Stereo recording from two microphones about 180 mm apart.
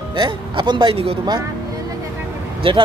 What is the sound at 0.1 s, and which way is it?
Speech, 30° right (ahead or behind).